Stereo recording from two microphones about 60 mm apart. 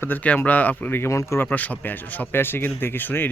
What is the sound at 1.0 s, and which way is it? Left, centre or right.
Speech, left.